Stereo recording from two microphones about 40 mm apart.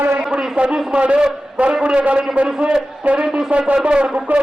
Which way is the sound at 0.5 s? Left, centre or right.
Right.